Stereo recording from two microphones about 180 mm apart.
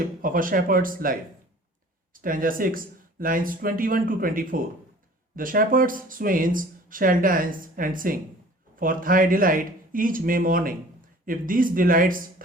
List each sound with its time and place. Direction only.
0.2 s speech: 50° right (ahead or behind)